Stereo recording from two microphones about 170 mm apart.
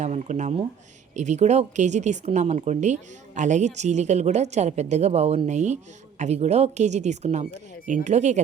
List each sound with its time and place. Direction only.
0.0 s speech: 45° right (ahead or behind)